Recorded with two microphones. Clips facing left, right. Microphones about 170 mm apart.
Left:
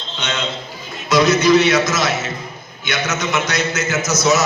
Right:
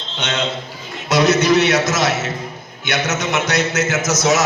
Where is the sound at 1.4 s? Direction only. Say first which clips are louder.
Left 1 dB; 65° right (ahead or behind).